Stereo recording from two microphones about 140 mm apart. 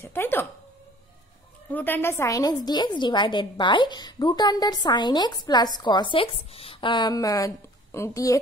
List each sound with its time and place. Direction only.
0.0 s speech: 15° left (ahead or behind)
1.7 s a woman's voice: 15° left (ahead or behind)